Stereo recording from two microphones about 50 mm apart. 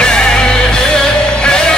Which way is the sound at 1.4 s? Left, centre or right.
Centre.